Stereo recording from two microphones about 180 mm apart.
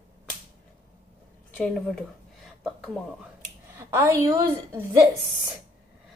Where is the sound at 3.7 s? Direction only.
15° right (ahead or behind).